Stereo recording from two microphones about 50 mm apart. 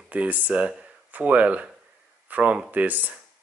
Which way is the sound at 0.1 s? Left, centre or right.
Right.